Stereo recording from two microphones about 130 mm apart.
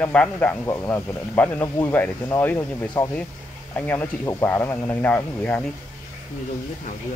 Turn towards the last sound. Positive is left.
turn(degrees=15)  # may be behind; listen again after turning